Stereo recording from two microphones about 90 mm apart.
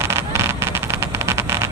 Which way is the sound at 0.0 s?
30° right (ahead or behind).